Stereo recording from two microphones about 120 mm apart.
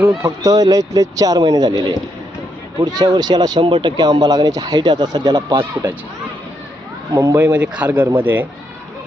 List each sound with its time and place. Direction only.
0.0 s speech: 25° right (ahead or behind)
7.1 s speech: 25° right (ahead or behind)